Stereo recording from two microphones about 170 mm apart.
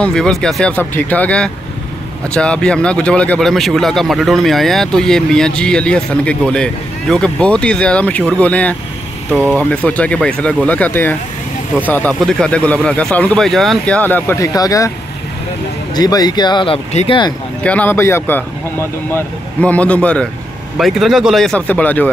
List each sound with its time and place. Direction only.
0.0 s speech: 5° left (ahead or behind); by 14.9 s 20° left (ahead or behind)
15.9 s speech: 25° left (ahead or behind)
17.6 s speech: 10° left (ahead or behind)